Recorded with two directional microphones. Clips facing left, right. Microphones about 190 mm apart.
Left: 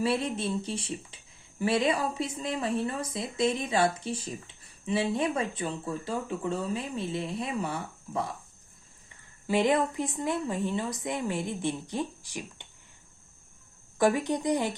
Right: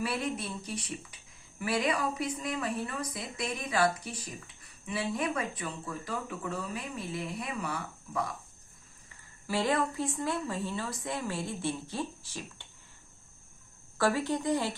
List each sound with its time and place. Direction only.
0.0 s speech: 25° left (ahead or behind)
9.5 s speech: 20° left (ahead or behind)
14.0 s speech: 20° left (ahead or behind)